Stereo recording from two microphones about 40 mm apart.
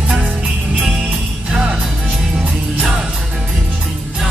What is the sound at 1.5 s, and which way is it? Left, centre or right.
Music, centre.